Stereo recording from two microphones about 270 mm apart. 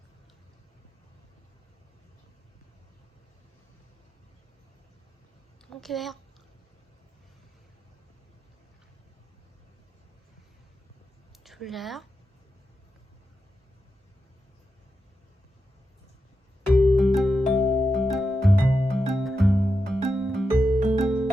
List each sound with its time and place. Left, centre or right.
5.7 s a woman's voice: centre
11.4 s speech: centre
16.7 s music: centre